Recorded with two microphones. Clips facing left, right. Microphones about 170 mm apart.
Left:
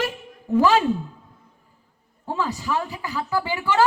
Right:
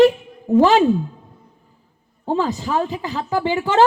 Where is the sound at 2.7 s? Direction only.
20° right (ahead or behind).